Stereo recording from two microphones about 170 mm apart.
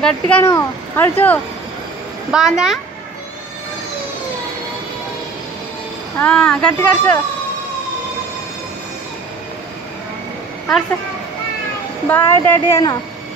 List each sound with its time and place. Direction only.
0.0 s speech: 10° left (ahead or behind)
2.3 s a woman's voice: 5° right (ahead or behind)
6.1 s speech: 5° left (ahead or behind)
12.1 s speech: 10° left (ahead or behind)